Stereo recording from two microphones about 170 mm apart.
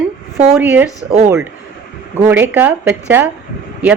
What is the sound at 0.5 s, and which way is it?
Speech, 10° right (ahead or behind).